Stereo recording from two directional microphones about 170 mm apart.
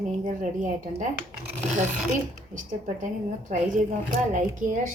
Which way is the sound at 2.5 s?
50° right (ahead or behind).